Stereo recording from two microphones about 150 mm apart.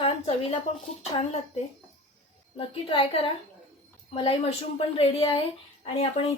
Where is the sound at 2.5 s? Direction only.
40° left (ahead or behind).